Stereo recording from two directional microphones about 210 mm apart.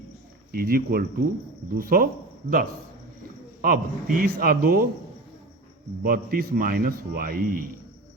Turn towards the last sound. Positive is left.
turn(degrees=-45)  # may be behind; listen again after turning